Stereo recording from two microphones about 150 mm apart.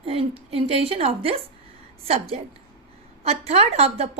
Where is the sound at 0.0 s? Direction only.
40° right (ahead or behind).